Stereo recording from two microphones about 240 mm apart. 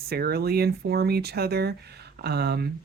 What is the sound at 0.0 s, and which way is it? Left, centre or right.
Speech, right.